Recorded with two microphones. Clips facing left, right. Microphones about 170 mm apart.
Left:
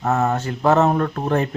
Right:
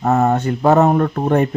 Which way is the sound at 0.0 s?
15° right (ahead or behind).